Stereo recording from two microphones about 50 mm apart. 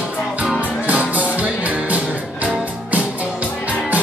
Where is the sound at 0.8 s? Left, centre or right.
Right.